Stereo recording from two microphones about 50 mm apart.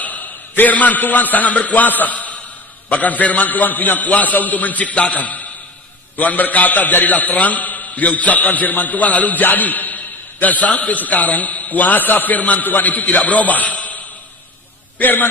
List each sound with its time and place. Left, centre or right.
0.0 s a man's voice: left